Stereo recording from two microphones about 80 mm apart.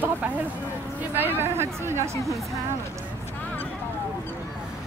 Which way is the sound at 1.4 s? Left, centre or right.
Right.